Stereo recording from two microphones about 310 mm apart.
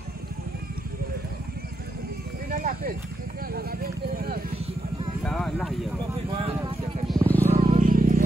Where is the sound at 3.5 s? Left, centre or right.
Right.